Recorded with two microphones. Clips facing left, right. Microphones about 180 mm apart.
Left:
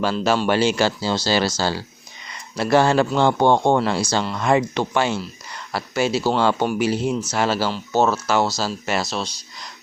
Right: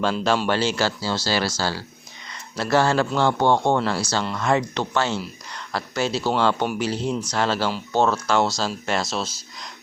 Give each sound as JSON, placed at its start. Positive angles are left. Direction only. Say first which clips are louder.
{"t": 0.0, "sound": "speech", "louder": "left 2 dB", "side_deg": 5}